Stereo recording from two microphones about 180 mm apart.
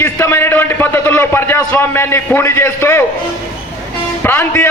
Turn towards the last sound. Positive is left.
turn(degrees=10)  # may be behind; listen again after turning